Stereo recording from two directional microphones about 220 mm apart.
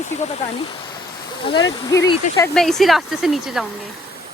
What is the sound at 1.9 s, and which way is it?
Speech, 15° left (ahead or behind).